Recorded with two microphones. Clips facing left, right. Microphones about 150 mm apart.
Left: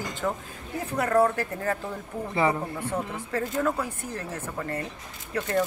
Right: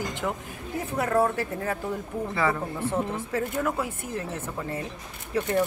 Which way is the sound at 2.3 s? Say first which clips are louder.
Left 2 dB; 20° left (ahead or behind).